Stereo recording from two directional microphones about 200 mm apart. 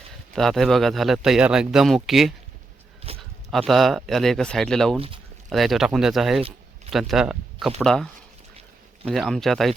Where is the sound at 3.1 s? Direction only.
30° right (ahead or behind).